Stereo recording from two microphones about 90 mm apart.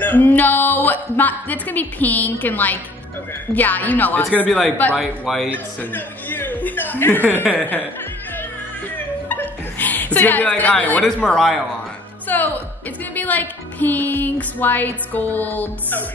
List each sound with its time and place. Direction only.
0.0 s music: 20° left (ahead or behind)
4.3 s speech: 15° left (ahead or behind)
4.9 s speech: centre (ahead or behind)
5.8 s speech: 20° left (ahead or behind)
8.9 s chuckle: 20° left (ahead or behind); by 11.6 s 5° left (ahead or behind)
12.3 s a woman's voice: 20° left (ahead or behind)
13.1 s music: 20° left (ahead or behind)